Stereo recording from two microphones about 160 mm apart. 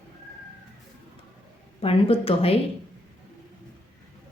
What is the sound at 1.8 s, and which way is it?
Speech, 35° left (ahead or behind).